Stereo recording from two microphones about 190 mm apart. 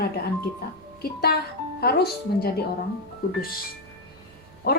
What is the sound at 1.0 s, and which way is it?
A woman's voice, 55° left (ahead or behind).